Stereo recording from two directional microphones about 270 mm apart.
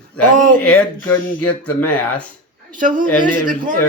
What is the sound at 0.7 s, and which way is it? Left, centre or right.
Speech, centre.